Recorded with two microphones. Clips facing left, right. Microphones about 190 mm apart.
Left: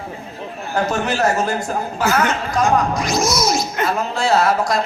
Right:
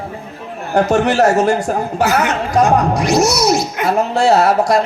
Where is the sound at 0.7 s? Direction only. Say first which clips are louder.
Right 7 dB; 70° right (ahead or behind).